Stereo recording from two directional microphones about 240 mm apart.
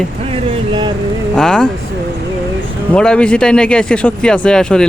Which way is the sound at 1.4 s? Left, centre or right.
Centre.